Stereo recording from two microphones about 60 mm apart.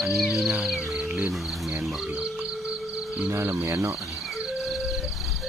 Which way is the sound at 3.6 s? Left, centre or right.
Right.